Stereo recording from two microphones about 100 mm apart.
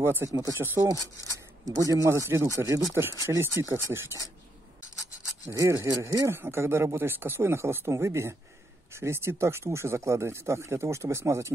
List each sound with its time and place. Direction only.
0.0 s speech: 25° right (ahead or behind)
5.5 s speech: 35° right (ahead or behind)
6.3 s speech: 25° right (ahead or behind)